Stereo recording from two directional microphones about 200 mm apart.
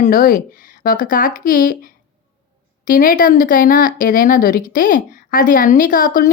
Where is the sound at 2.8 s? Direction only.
45° left (ahead or behind).